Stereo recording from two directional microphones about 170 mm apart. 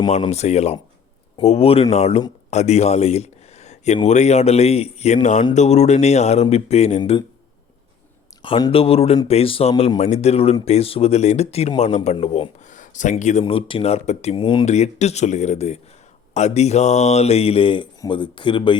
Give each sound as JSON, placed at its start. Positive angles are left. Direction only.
{"t": 0.2, "sound": "speech", "side_deg": 40}
{"t": 7.0, "sound": "speech", "side_deg": 25}
{"t": 8.4, "sound": "a man's voice", "side_deg": 30}
{"t": 13.4, "sound": "speech", "side_deg": 30}
{"t": 14.6, "sound": "speech", "side_deg": 40}